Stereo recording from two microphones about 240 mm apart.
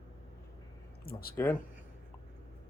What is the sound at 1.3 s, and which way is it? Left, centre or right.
Speech, centre.